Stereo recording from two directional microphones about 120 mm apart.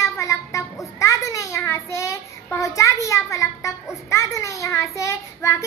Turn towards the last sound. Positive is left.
turn(degrees=25)  # may be behind; listen again after turning